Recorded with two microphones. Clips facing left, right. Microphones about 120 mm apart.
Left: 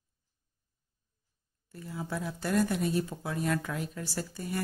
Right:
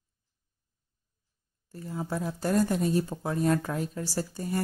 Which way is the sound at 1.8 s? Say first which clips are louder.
Right 4 dB; 35° right (ahead or behind).